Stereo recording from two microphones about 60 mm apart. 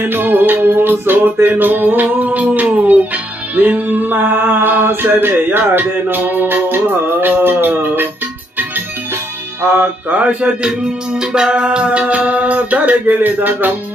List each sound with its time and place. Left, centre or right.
0.0 s music: right
9.6 s music: right